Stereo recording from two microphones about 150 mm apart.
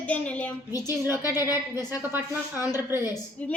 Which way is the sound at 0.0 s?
10° left (ahead or behind).